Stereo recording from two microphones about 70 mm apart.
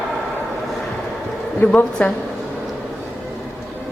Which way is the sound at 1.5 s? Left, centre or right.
Centre.